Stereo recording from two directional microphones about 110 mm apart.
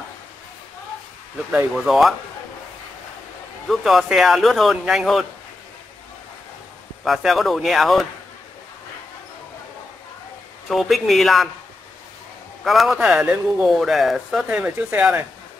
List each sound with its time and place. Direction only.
1.9 s speech: centre (ahead or behind)
3.6 s speech: centre (ahead or behind)
7.1 s speech: centre (ahead or behind)
10.7 s speech: centre (ahead or behind)
12.6 s speech: centre (ahead or behind)
14.5 s speech: 15° right (ahead or behind)